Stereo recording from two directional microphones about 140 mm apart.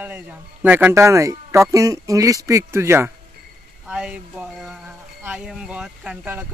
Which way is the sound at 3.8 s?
5° right (ahead or behind).